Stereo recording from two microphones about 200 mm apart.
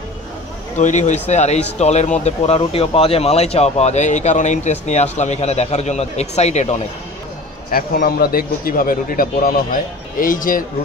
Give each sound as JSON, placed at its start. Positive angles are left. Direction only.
{"t": 0.7, "sound": "speech", "side_deg": 35}
{"t": 7.7, "sound": "a man's voice", "side_deg": 50}